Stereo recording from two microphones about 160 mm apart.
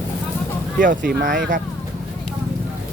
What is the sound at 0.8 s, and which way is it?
Speech, 60° right (ahead or behind).